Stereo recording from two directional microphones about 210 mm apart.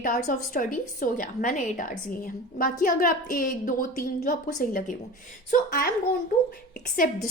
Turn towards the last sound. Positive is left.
turn(degrees=40)  # may be behind; listen again after turning